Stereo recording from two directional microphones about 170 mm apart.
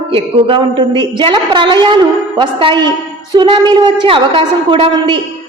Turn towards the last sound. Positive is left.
turn(degrees=-30)  # may be behind; listen again after turning